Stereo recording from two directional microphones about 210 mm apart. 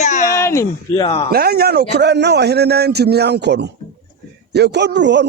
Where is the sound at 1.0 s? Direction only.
25° left (ahead or behind).